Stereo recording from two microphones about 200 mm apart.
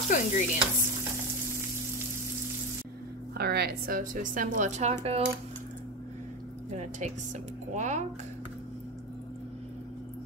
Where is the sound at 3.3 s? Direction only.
50° right (ahead or behind); by 4.9 s 35° right (ahead or behind).